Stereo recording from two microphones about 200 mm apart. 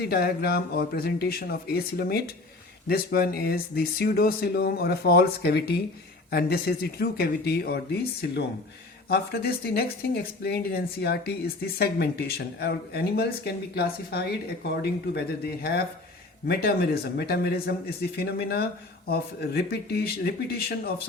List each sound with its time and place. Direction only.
0.0 s speech: 50° left (ahead or behind)